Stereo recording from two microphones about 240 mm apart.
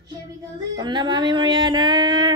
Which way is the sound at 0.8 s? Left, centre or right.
Centre.